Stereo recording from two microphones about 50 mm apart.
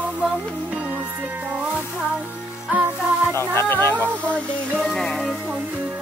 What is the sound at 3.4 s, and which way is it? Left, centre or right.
Music, left.